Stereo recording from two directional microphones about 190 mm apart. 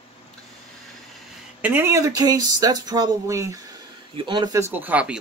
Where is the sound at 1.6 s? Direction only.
10° right (ahead or behind).